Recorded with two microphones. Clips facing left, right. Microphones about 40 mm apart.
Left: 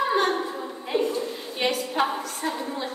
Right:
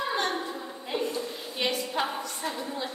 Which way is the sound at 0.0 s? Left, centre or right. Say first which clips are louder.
Left 6 dB; centre.